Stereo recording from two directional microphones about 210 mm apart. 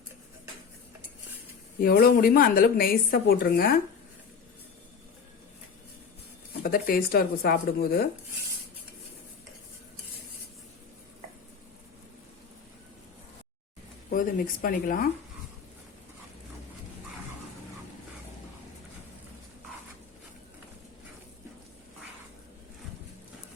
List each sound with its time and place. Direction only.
1.8 s a woman's voice: 45° left (ahead or behind)
6.6 s a woman's voice: 45° left (ahead or behind)
14.1 s speech: 40° left (ahead or behind)